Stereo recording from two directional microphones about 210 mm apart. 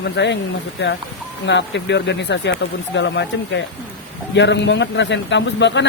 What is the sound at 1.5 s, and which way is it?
A man's voice, 60° left (ahead or behind).